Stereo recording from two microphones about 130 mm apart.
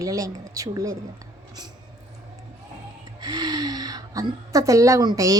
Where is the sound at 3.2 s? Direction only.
30° right (ahead or behind).